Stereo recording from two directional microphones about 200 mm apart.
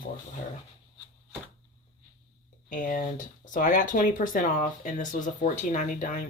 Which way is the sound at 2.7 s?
45° left (ahead or behind).